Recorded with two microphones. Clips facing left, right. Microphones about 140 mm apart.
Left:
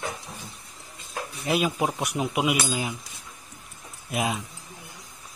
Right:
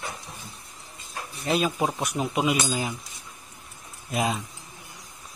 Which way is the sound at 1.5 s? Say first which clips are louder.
Even; 15° left (ahead or behind).